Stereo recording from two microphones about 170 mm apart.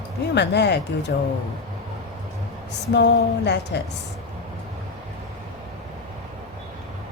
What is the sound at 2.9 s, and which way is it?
Speech, 85° left.